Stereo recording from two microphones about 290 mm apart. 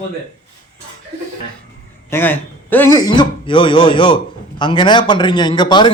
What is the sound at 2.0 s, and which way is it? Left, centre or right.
Speech, centre.